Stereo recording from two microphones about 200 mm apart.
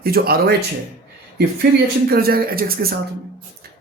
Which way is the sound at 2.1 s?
50° right (ahead or behind).